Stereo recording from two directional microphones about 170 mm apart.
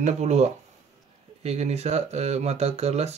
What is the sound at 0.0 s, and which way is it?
Speech, 40° right (ahead or behind).